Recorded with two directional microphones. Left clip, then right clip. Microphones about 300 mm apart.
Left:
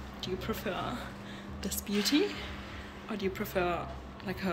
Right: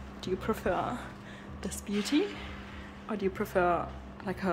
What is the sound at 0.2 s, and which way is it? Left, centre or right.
A woman's voice, right.